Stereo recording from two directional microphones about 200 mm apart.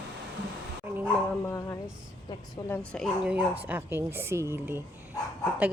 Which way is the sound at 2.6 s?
10° left (ahead or behind).